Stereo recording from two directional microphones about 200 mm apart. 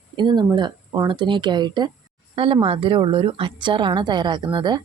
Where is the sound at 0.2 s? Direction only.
20° right (ahead or behind).